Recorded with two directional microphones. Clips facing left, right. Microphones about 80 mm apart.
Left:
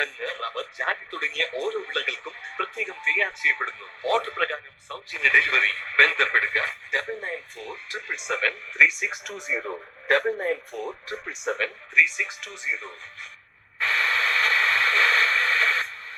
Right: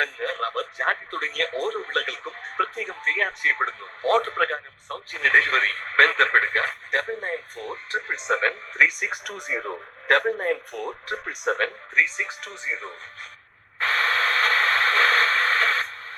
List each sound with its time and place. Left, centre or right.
0.0 s speech: right
8.9 s speech: right
13.7 s a sound: right